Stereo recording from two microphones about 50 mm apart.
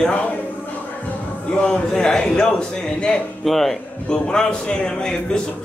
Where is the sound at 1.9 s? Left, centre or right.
Centre.